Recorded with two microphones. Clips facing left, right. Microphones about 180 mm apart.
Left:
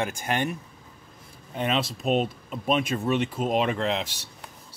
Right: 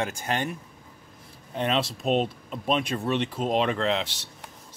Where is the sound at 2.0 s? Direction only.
5° left (ahead or behind).